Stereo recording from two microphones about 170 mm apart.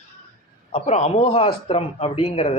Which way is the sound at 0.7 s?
40° left (ahead or behind).